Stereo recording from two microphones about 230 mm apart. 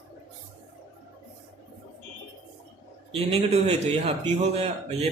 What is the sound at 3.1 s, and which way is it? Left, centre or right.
A man's voice, right.